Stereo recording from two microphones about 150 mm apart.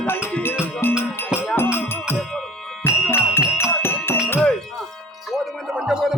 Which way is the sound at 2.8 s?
15° left (ahead or behind).